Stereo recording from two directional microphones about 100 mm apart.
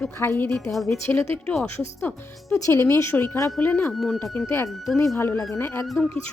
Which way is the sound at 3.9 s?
5° left (ahead or behind).